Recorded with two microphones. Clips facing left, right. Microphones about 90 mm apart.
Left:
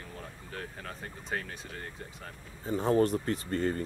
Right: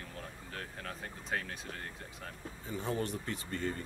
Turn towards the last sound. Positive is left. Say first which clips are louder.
# left 7 dB
turn(degrees=45)  # may be behind; listen again after turning